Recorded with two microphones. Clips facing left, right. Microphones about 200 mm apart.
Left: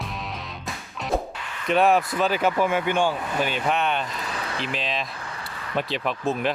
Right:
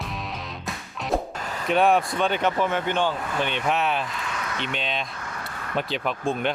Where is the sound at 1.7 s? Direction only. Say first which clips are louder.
Left 1 dB; centre (ahead or behind).